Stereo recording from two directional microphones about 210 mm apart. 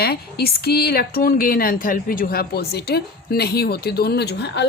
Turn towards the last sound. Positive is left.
turn(degrees=55)  # may be behind; listen again after turning